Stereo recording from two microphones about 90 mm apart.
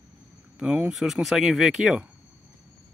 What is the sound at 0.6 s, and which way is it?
Speech, 10° right (ahead or behind).